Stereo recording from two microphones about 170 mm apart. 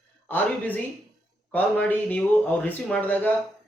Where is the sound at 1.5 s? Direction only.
10° left (ahead or behind).